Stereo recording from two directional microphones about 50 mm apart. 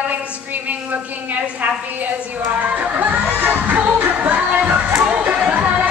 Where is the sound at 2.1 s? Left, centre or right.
Right.